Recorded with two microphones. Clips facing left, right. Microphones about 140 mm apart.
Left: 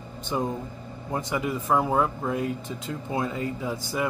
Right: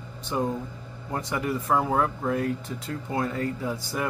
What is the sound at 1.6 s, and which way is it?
Speech, 10° left (ahead or behind).